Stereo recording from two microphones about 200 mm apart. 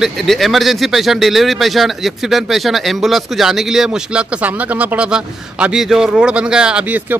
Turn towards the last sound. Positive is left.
turn(degrees=-10)  # may be behind; listen again after turning